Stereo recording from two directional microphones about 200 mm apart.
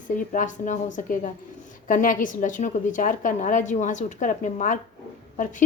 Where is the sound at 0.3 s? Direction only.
40° left (ahead or behind).